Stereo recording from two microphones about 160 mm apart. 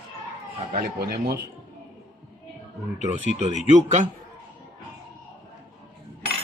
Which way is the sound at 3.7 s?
50° right (ahead or behind).